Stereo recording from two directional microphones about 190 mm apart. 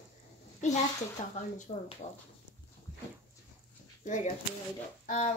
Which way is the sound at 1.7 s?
40° left (ahead or behind).